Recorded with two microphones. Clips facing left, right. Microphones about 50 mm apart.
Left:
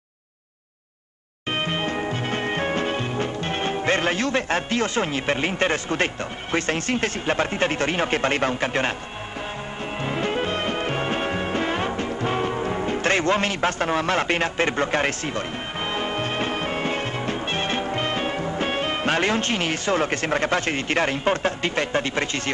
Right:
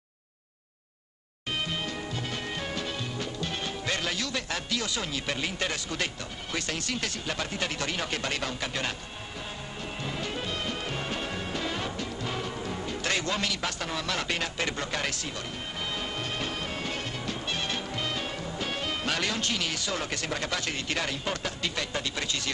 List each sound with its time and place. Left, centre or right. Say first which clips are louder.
1.5 s music: left 7 dB; left
6.5 s speech: left 9 dB; left
10.0 s music: left 10 dB; left